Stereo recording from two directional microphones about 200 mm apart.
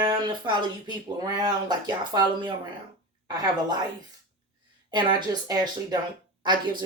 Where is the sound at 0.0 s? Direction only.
25° right (ahead or behind).